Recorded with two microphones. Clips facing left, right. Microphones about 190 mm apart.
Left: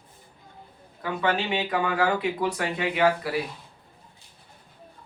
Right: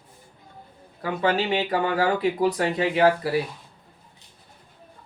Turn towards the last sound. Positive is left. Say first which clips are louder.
# right 3 dB
turn(degrees=-35)  # may be behind; listen again after turning